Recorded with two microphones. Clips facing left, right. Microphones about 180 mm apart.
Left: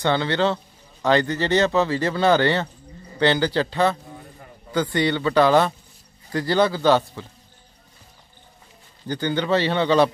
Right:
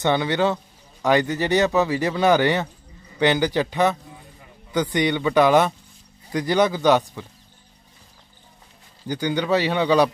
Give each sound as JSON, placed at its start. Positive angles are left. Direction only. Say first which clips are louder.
{"t": 0.0, "sound": "speech", "louder": "right 1 dB", "side_deg": -15}
{"t": 9.0, "sound": "speech", "louder": "even", "side_deg": -15}